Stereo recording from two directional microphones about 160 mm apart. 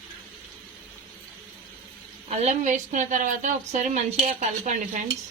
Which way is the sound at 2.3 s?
50° right (ahead or behind).